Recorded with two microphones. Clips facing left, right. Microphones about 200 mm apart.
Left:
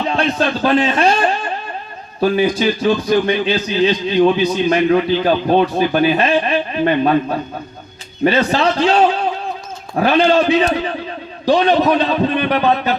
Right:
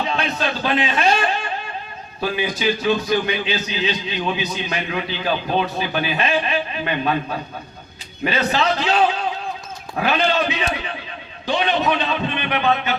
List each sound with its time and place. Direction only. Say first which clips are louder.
0.1 s speech: left 6 dB; 40° left (ahead or behind)